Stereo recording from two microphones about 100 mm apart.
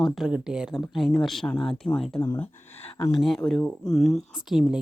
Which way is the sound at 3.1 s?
Centre (ahead or behind).